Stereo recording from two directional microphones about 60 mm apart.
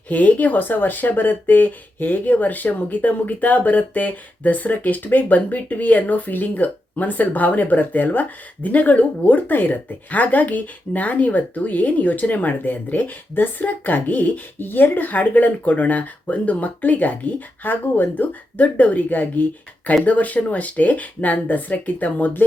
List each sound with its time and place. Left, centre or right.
0.1 s speech: left